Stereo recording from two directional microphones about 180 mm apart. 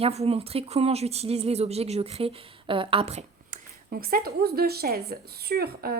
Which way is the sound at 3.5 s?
55° right (ahead or behind).